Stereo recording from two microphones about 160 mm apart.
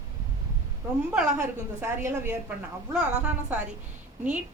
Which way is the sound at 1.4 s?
15° right (ahead or behind).